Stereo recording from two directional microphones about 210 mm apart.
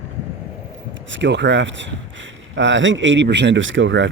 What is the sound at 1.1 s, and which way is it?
Speech, 60° right (ahead or behind).